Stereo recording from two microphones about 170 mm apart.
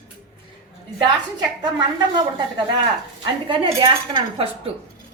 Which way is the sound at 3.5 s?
30° right (ahead or behind).